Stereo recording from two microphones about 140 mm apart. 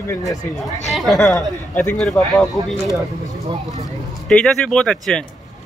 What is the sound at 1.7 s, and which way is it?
Speech, 15° left (ahead or behind).